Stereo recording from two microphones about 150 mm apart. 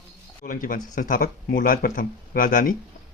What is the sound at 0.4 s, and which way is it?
Speech, 65° left (ahead or behind).